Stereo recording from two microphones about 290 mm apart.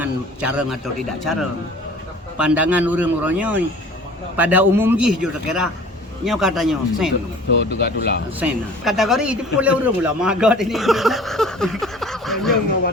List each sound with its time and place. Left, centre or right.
0.0 s speech: centre
2.4 s speech: centre
4.9 s speech: right
5.2 s speech: centre
7.5 s speech: left
8.4 s speech: centre